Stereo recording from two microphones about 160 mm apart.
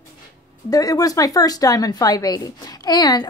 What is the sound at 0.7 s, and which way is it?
Speech, 20° left (ahead or behind).